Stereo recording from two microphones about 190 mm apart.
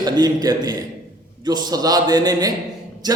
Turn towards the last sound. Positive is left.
turn(degrees=-20)  # may be behind; listen again after turning